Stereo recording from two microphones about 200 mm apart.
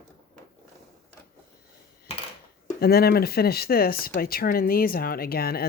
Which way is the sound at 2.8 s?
50° left (ahead or behind).